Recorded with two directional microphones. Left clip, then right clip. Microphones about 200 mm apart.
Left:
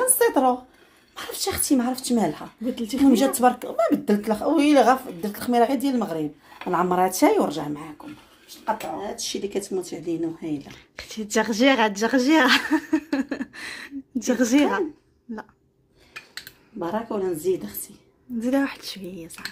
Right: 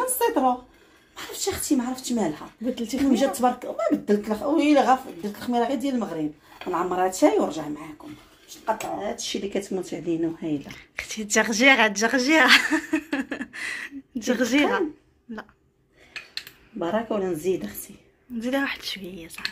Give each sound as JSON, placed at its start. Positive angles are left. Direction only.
{"t": 0.1, "sound": "a sound", "side_deg": 50}
{"t": 1.1, "sound": "speech", "side_deg": 50}
{"t": 2.6, "sound": "speech", "side_deg": 0}
{"t": 3.1, "sound": "speech", "side_deg": 50}
{"t": 9.0, "sound": "speech", "side_deg": -20}
{"t": 10.7, "sound": "a woman's voice", "side_deg": 20}
{"t": 16.7, "sound": "speech", "side_deg": -20}
{"t": 18.4, "sound": "a woman's voice", "side_deg": 25}